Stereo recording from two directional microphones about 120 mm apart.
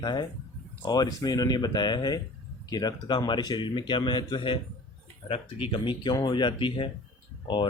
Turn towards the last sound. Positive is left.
turn(degrees=40)  # may be behind; listen again after turning